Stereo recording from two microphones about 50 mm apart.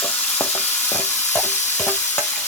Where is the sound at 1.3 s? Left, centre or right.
Left.